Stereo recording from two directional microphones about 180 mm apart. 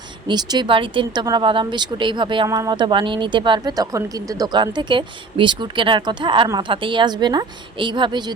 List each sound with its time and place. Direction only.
0.3 s speech: 20° right (ahead or behind)